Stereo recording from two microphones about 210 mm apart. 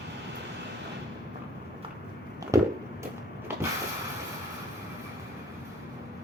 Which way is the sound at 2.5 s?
15° right (ahead or behind).